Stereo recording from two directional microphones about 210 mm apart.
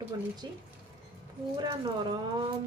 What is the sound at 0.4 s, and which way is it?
Speech, 20° right (ahead or behind).